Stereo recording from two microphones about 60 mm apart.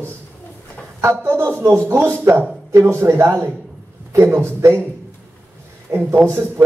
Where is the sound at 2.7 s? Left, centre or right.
Right.